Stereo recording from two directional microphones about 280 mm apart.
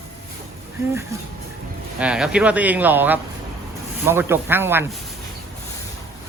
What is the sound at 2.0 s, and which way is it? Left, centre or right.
Speech, centre.